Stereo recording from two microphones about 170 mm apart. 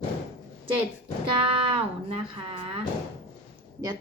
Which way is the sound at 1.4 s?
30° right (ahead or behind).